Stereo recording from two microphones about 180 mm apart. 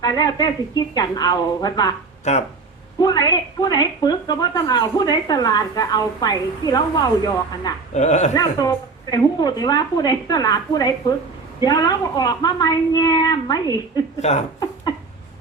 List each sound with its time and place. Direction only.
0.0 s speech: 20° left (ahead or behind)
2.3 s speech: 40° left (ahead or behind)
3.0 s speech: 20° left (ahead or behind)
7.9 s speech: 40° left (ahead or behind)
8.3 s speech: 20° left (ahead or behind)
14.2 s speech: 40° left (ahead or behind)